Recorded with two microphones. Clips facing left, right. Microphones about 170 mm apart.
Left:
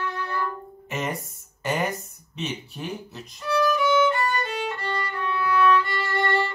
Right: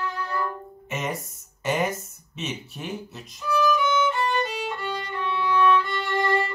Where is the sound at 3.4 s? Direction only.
70° left (ahead or behind).